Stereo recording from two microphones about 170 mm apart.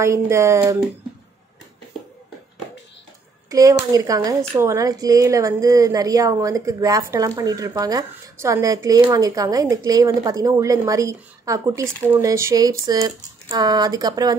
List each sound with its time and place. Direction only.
0.0 s speech: 15° right (ahead or behind)
3.4 s a woman's voice: 20° right (ahead or behind)